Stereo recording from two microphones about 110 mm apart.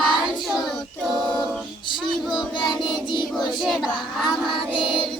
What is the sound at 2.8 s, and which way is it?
Child singing, 45° left (ahead or behind).